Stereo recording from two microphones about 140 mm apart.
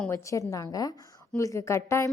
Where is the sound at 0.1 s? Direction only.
20° left (ahead or behind).